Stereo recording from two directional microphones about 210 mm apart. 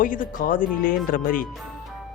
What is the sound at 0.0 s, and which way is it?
Music, 40° left (ahead or behind).